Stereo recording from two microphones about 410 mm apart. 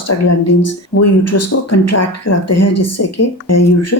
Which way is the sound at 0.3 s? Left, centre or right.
Left.